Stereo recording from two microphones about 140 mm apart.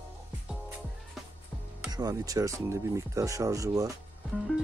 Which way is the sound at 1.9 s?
25° right (ahead or behind).